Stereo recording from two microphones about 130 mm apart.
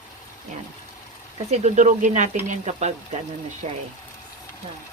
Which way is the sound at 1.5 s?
60° right (ahead or behind).